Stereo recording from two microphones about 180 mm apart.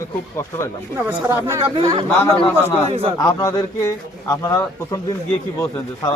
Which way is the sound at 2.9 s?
35° right (ahead or behind).